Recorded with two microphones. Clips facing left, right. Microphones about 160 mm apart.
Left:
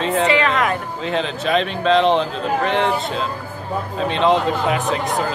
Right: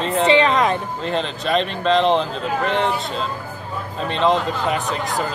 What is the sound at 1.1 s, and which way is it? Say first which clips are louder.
Speech: left 2 dB; centre (ahead or behind).